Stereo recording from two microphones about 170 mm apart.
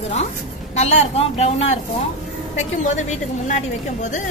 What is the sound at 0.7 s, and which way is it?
Speech, 40° left (ahead or behind).